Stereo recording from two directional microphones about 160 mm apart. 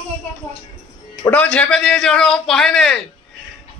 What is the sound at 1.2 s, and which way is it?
A man's voice, 10° left (ahead or behind).